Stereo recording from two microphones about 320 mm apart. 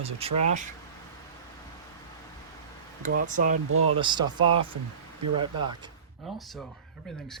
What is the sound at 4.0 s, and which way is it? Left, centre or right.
Speech, centre.